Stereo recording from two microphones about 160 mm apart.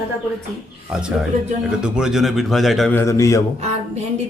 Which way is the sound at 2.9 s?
20° left (ahead or behind).